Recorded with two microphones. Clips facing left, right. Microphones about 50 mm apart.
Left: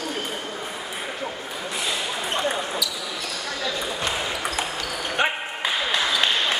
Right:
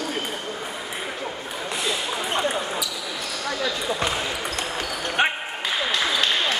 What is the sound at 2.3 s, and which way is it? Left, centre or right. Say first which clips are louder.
Basketball bounce: right 1 dB; centre.